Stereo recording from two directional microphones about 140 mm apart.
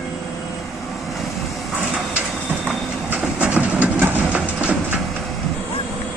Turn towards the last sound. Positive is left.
turn(degrees=-10)  # may be behind; listen again after turning